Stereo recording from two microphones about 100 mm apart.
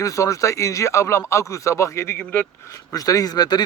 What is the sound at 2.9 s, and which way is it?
Speech, 35° left (ahead or behind).